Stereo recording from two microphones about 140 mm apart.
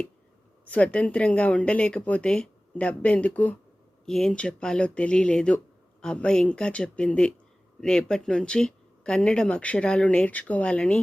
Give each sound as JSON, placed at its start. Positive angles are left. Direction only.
{"t": 0.7, "sound": "speech", "side_deg": 10}